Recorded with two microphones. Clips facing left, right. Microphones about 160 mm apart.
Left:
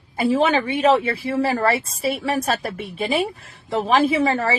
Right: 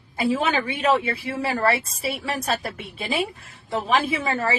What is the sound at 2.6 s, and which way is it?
A woman's voice, 30° left (ahead or behind).